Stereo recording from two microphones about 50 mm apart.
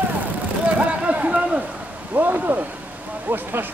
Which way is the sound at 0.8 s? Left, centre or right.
Right.